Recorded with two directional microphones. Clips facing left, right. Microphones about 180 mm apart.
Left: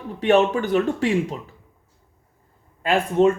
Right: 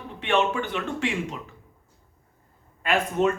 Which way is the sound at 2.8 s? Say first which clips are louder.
Left 5 dB; 30° left (ahead or behind).